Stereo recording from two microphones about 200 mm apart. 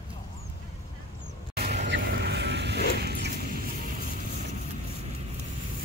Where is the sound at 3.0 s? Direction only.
55° right (ahead or behind).